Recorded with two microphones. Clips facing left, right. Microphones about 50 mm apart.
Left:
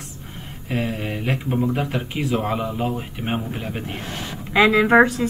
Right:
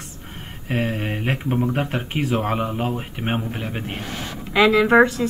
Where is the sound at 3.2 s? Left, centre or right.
Right.